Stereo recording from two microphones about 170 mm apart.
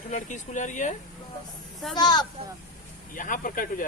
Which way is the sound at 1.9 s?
25° left (ahead or behind).